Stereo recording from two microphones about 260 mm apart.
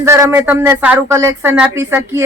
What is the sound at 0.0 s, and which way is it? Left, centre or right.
A woman's voice, centre.